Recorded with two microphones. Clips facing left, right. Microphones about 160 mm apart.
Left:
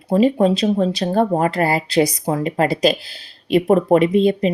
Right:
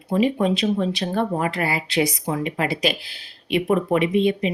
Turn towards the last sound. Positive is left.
turn(degrees=40)  # may be behind; listen again after turning